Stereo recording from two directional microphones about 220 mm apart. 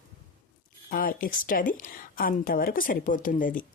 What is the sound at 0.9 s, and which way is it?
Speech, 40° left (ahead or behind).